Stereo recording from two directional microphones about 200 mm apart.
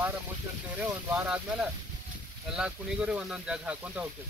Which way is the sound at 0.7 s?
10° right (ahead or behind).